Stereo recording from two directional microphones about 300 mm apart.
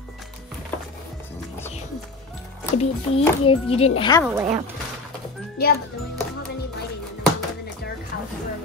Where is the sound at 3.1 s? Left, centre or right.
Centre.